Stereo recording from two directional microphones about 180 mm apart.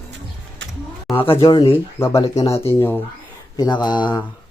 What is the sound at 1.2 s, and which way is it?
Speech, 30° left (ahead or behind).